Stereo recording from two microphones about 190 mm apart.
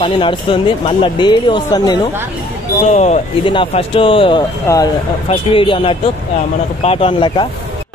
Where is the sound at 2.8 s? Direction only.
35° left (ahead or behind).